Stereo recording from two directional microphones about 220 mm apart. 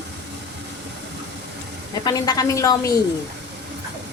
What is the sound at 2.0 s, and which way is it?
Speech, 15° left (ahead or behind).